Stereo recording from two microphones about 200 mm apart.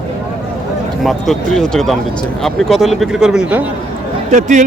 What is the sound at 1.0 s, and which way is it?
Speech, centre (ahead or behind).